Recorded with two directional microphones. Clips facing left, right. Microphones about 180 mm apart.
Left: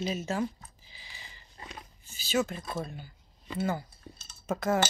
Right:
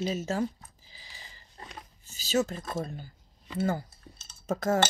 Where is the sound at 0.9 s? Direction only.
40° right (ahead or behind).